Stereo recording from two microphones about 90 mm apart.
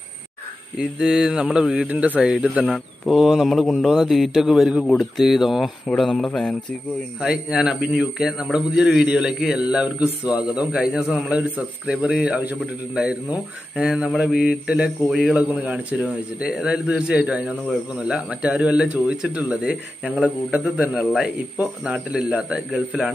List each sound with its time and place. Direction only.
0.7 s a man's voice: 10° right (ahead or behind)
2.7 s speech: centre (ahead or behind)
7.2 s a man's voice: 10° right (ahead or behind)
11.8 s a man's voice: 5° right (ahead or behind)
15.3 s a man's voice: 15° right (ahead or behind)